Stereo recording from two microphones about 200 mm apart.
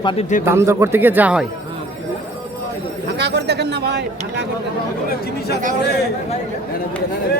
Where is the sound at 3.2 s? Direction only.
60° right (ahead or behind).